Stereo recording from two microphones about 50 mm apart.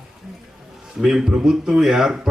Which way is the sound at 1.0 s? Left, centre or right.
Centre.